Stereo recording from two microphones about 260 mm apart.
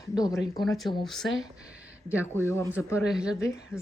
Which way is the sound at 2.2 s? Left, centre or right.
Centre.